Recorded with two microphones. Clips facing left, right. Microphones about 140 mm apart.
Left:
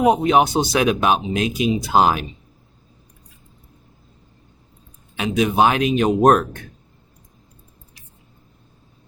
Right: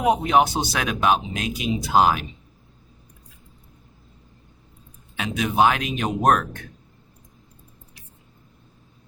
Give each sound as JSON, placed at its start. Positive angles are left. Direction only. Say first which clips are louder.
{"t": 0.0, "sound": "speech", "louder": "left 3 dB", "side_deg": 25}
{"t": 5.1, "sound": "speech", "louder": "left 4 dB", "side_deg": 20}